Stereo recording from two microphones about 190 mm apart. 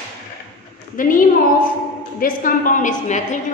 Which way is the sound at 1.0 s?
45° left (ahead or behind).